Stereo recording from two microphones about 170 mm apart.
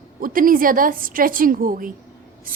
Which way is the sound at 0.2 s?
55° right (ahead or behind).